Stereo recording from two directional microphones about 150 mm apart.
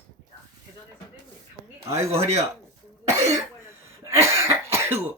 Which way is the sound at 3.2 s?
20° right (ahead or behind).